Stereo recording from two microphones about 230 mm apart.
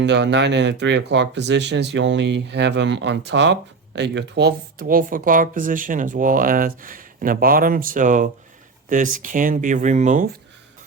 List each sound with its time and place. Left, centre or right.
0.0 s speech: right